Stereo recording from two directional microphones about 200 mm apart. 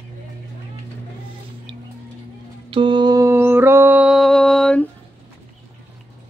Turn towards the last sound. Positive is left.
turn(degrees=5)  # may be behind; listen again after turning